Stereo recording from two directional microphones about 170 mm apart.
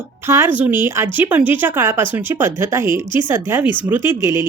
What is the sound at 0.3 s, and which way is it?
Speech, 15° right (ahead or behind).